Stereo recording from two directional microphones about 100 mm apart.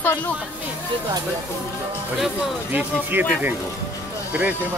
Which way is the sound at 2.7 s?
20° right (ahead or behind).